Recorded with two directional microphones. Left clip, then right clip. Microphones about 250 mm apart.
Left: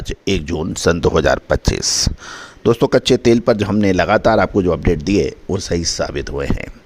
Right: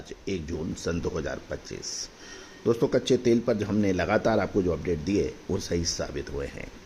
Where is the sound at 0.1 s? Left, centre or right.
Left.